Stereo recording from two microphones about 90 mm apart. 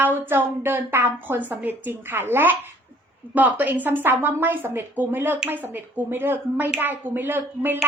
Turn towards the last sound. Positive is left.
turn(degrees=-20)  # may be behind; listen again after turning